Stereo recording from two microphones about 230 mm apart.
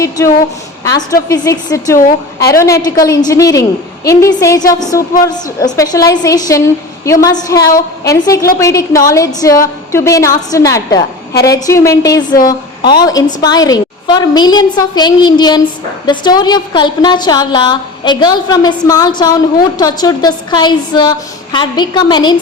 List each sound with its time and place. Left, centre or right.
1.3 s a woman's voice: centre
2.0 s a woman's voice: left
2.5 s a woman's voice: centre